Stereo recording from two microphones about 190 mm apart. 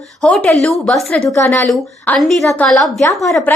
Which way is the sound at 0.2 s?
5° left (ahead or behind).